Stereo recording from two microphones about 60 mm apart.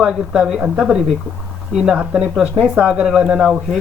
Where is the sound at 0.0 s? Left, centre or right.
Centre.